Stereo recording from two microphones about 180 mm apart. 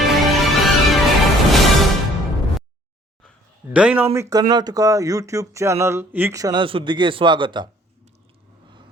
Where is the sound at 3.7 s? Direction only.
5° right (ahead or behind); by 7.7 s 25° right (ahead or behind).